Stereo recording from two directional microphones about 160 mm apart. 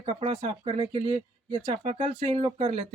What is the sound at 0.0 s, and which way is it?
Speech, 40° right (ahead or behind).